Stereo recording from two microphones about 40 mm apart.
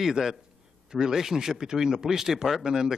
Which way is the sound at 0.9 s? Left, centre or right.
Centre.